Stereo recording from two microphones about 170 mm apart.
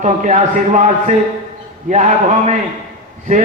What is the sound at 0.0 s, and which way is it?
A man's voice, 45° right (ahead or behind).